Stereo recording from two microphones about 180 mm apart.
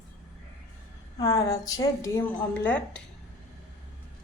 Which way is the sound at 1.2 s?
20° left (ahead or behind).